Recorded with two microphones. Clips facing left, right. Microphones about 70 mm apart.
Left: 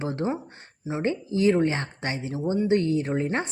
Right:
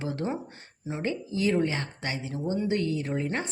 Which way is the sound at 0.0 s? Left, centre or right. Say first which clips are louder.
Left 3 dB; left.